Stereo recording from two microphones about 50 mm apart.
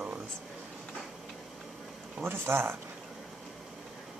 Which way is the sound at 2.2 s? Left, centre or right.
Right.